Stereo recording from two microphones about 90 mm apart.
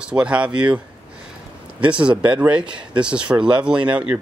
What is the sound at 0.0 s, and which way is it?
Speech, 10° right (ahead or behind).